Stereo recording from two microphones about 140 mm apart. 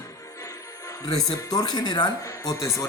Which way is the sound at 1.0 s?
25° left (ahead or behind).